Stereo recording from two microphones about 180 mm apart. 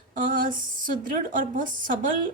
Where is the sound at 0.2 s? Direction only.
50° right (ahead or behind).